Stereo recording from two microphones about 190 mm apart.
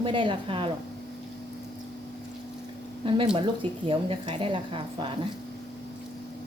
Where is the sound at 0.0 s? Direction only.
25° right (ahead or behind).